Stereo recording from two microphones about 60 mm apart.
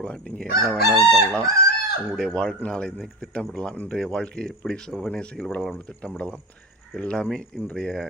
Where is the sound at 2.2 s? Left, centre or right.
Centre.